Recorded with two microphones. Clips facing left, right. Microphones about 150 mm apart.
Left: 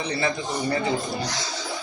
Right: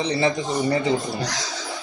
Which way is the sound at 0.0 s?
25° right (ahead or behind).